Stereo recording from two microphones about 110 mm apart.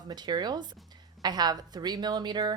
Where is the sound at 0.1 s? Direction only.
40° right (ahead or behind).